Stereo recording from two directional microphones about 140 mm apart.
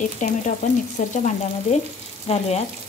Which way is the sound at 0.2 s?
60° left (ahead or behind).